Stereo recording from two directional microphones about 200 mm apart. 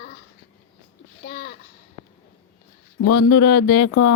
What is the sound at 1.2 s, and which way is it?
Speech, 45° left (ahead or behind).